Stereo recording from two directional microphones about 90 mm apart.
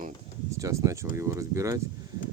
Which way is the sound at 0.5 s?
35° right (ahead or behind).